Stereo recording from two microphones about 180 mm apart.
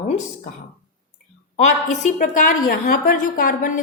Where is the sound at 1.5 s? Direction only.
40° left (ahead or behind).